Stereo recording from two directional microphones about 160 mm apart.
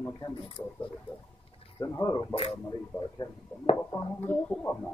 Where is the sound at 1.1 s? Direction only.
35° left (ahead or behind).